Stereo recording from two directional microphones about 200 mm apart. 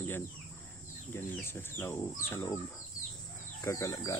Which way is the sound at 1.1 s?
10° left (ahead or behind).